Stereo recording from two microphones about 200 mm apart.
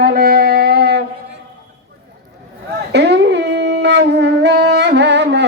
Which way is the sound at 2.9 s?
55° right (ahead or behind).